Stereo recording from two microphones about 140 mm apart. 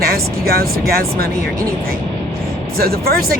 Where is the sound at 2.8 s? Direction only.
90° right.